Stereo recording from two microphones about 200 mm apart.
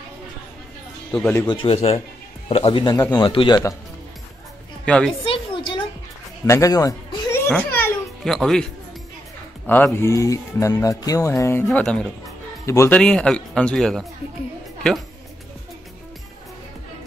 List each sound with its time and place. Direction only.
1.1 s speech: 10° left (ahead or behind)
4.8 s a woman's voice: 5° left (ahead or behind)
5.2 s a sound: 25° left (ahead or behind)
6.4 s a sound: 15° left (ahead or behind)
9.7 s speech: 10° left (ahead or behind)
13.0 s a man's voice: 5° left (ahead or behind)